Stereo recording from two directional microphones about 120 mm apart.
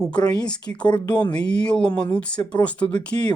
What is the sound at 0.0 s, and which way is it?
Speech, 10° left (ahead or behind).